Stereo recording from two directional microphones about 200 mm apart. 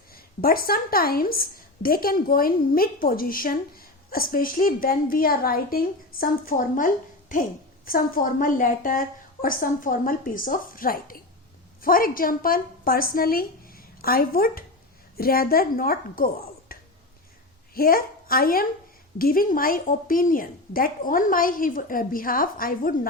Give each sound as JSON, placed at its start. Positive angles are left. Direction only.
{"t": 0.1, "sound": "a woman's voice", "side_deg": 50}
{"t": 17.7, "sound": "a woman's voice", "side_deg": 45}